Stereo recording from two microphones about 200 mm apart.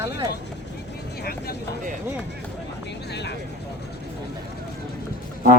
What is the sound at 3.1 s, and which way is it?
Speech, 60° left (ahead or behind).